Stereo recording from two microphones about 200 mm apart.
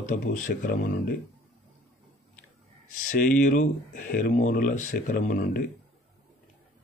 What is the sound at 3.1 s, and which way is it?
Speech, 40° left (ahead or behind).